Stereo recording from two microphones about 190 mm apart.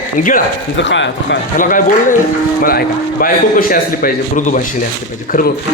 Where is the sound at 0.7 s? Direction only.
75° left (ahead or behind).